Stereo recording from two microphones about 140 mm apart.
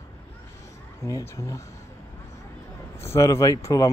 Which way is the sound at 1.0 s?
20° left (ahead or behind).